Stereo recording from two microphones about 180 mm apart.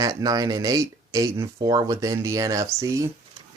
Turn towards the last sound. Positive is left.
turn(degrees=-15)  # may be behind; listen again after turning